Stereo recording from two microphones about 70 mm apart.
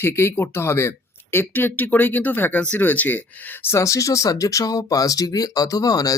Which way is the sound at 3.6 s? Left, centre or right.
Left.